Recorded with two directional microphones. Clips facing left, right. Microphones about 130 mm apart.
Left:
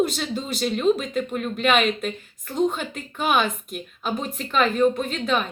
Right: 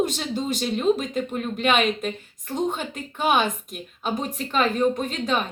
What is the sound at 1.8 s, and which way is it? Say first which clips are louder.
Speech: even; 35° right (ahead or behind).